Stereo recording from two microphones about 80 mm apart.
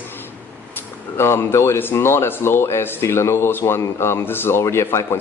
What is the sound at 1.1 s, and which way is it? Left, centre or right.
Speech, left.